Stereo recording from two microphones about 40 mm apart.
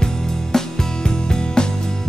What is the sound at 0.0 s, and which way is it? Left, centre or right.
Music, centre.